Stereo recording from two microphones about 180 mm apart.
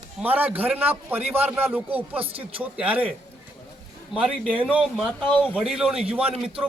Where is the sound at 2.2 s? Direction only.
30° right (ahead or behind).